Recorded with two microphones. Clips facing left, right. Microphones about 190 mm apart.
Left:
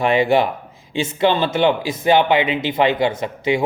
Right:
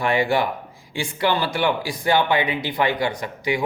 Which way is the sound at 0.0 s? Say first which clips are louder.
Left 5 dB; 20° left (ahead or behind).